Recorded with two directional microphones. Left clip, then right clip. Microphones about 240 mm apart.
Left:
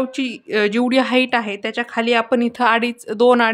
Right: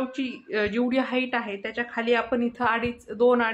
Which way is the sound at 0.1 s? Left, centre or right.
Left.